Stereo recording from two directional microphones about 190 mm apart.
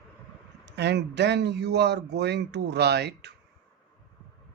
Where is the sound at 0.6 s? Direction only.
65° right (ahead or behind).